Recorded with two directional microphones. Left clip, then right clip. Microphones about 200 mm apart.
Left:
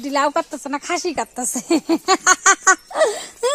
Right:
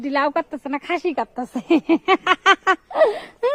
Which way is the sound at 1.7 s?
20° right (ahead or behind).